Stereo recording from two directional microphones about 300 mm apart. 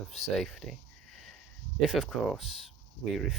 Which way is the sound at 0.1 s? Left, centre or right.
Centre.